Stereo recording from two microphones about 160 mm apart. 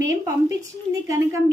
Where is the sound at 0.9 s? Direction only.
20° right (ahead or behind).